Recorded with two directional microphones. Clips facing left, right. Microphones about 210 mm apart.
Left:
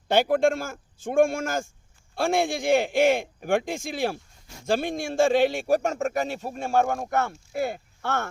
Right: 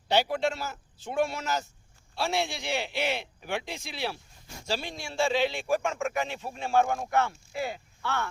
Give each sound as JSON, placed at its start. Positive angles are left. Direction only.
{"t": 0.1, "sound": "a man's voice", "side_deg": 50}